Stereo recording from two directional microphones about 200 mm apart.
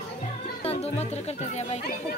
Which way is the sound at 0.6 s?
30° left (ahead or behind).